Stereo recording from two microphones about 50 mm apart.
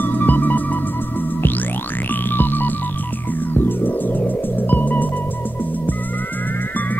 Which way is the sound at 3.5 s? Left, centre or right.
Left.